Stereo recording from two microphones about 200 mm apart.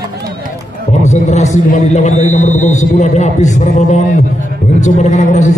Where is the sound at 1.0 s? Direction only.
35° left (ahead or behind).